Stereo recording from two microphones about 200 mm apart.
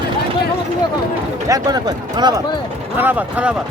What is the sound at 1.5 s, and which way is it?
Speech, 20° right (ahead or behind).